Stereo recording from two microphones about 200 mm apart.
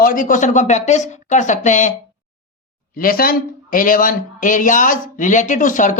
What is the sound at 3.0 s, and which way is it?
Speech, 45° left (ahead or behind).